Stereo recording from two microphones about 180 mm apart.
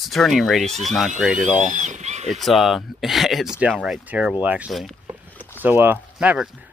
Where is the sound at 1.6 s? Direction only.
40° right (ahead or behind).